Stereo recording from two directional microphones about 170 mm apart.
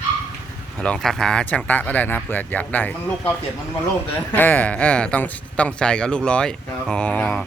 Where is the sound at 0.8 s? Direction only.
5° left (ahead or behind).